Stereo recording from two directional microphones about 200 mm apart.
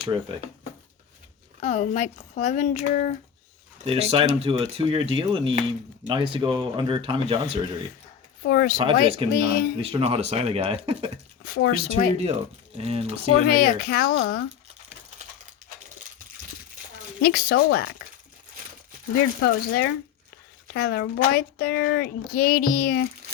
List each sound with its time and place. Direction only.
0.1 s speech: 25° right (ahead or behind)
1.6 s speech: 35° left (ahead or behind)
3.8 s speech: 30° right (ahead or behind)
8.4 s speech: 45° left (ahead or behind)
9.0 s speech: 30° right (ahead or behind)
9.3 s speech: 50° left (ahead or behind)
9.7 s speech: 25° right (ahead or behind)
11.4 s speech: 45° left (ahead or behind)
12.7 s speech: 30° right (ahead or behind)
13.5 s speech: 50° left (ahead or behind)
17.2 s speech: 55° left (ahead or behind)
19.4 s speech: 55° left (ahead or behind)